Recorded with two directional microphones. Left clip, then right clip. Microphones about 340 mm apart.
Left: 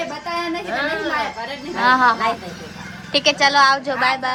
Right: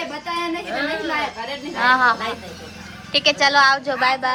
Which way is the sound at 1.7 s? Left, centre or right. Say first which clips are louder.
Left 1 dB; centre.